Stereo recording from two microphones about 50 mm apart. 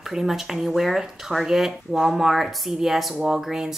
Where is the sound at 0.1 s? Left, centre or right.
Centre.